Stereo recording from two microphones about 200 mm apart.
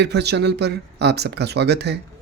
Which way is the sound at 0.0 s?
55° right (ahead or behind).